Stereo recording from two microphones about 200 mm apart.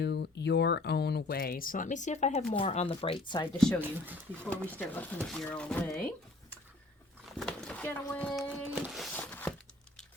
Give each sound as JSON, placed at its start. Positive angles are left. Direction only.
{"t": 0.0, "sound": "speech", "side_deg": 55}
{"t": 3.8, "sound": "speech", "side_deg": -10}
{"t": 4.7, "sound": "speech", "side_deg": 10}
{"t": 7.3, "sound": "speech", "side_deg": 5}
{"t": 8.7, "sound": "a sound", "side_deg": 0}